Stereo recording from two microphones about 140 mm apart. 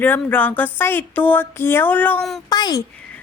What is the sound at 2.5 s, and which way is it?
Speech, 30° left (ahead or behind).